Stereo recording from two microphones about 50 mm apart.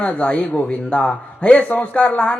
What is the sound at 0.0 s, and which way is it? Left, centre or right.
A man's voice, left.